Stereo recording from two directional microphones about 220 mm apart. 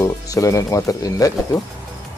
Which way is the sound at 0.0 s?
15° left (ahead or behind).